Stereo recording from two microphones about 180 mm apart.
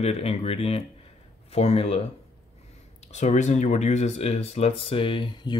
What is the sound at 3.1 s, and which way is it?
Speech, 40° left (ahead or behind).